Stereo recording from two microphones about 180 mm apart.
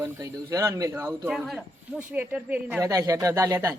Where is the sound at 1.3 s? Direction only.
Centre (ahead or behind).